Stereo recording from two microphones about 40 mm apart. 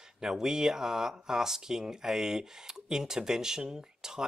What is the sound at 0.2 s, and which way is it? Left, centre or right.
Speech, centre.